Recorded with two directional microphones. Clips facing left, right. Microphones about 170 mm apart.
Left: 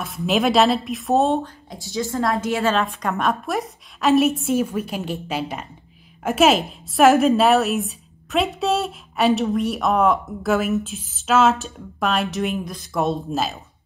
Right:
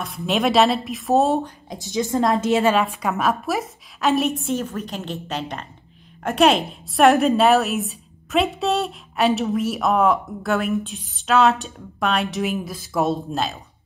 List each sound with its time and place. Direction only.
0.0 s a woman's voice: centre (ahead or behind)
1.4 s a woman's voice: 20° right (ahead or behind)
2.7 s a woman's voice: 10° right (ahead or behind)